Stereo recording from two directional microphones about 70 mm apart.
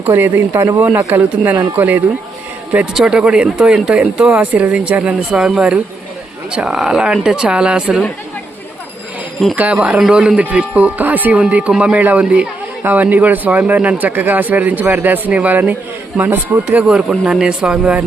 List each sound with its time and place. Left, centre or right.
0.1 s speech: right
2.9 s speech: centre
9.4 s speech: centre
10.1 s speech: centre
16.8 s speech: centre